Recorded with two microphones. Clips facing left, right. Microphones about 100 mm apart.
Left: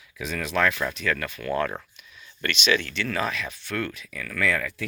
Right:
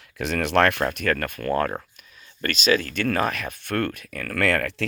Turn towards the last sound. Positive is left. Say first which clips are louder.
# right 4 dB
turn(degrees=-70)  # may be behind; listen again after turning